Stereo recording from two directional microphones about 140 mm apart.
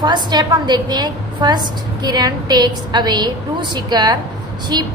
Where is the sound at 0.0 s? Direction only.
30° right (ahead or behind).